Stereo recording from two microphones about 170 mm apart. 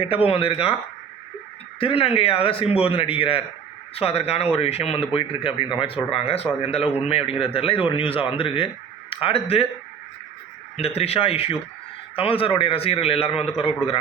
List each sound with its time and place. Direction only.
0.0 s speech: 35° left (ahead or behind)
1.8 s speech: 35° left (ahead or behind)
10.8 s speech: 35° left (ahead or behind)